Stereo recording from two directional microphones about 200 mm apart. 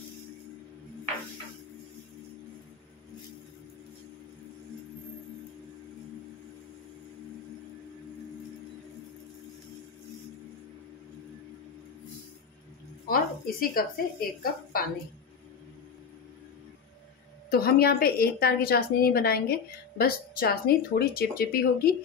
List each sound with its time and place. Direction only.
13.1 s a sound: 45° left (ahead or behind)
14.4 s a woman's voice: 45° left (ahead or behind)
17.5 s a woman's voice: 50° left (ahead or behind)